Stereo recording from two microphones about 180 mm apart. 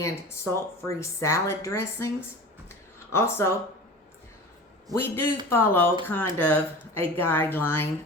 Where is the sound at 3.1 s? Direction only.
15° left (ahead or behind).